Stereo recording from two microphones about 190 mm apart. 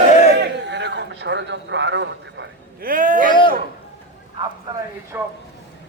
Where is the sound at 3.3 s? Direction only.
25° left (ahead or behind).